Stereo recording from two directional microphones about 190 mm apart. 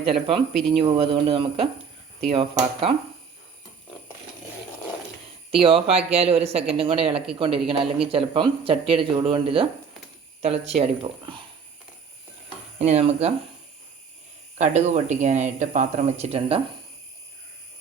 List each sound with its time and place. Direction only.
0.0 s speech: 30° right (ahead or behind)
5.5 s speech: 30° right (ahead or behind)
12.8 s speech: 35° right (ahead or behind)
14.6 s speech: 40° right (ahead or behind)